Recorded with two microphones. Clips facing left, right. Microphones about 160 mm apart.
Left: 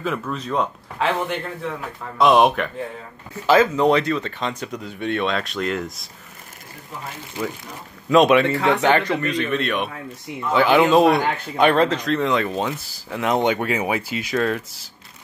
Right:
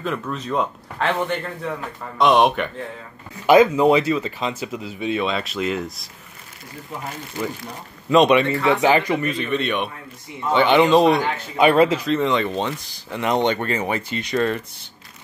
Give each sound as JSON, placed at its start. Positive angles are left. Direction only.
{"t": 0.0, "sound": "speech", "side_deg": 0}
{"t": 3.4, "sound": "speech", "side_deg": -15}
{"t": 3.8, "sound": "speech", "side_deg": -5}
{"t": 8.1, "sound": "speech", "side_deg": 0}